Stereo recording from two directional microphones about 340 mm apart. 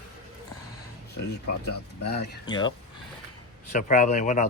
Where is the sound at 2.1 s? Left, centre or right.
Left.